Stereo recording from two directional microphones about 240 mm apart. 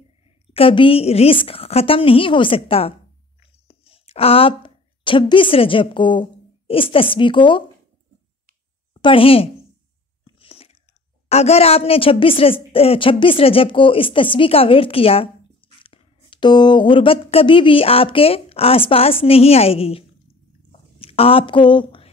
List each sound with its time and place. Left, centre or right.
0.5 s a woman's voice: left
8.9 s a woman's voice: left
10.2 s biting: left
11.2 s a woman's voice: left
20.7 s a sound: left